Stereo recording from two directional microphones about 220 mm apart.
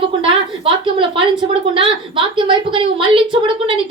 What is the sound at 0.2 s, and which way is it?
A woman's voice, 25° right (ahead or behind).